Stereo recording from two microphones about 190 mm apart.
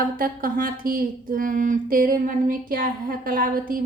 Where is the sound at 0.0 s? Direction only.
50° right (ahead or behind).